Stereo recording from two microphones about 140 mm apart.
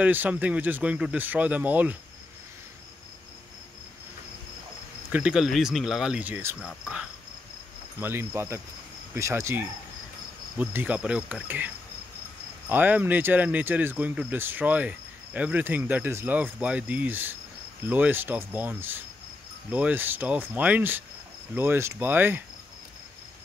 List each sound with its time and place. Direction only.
0.0 s speech: 10° right (ahead or behind)
5.1 s speech: 5° right (ahead or behind)
8.0 s speech: 15° right (ahead or behind)